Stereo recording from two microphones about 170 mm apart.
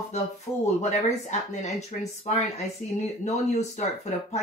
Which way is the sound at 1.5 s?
40° left (ahead or behind).